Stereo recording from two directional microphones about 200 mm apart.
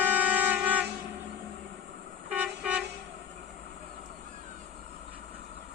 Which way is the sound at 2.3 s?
5° right (ahead or behind).